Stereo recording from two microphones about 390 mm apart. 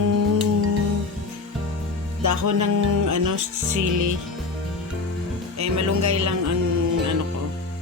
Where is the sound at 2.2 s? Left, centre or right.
Right.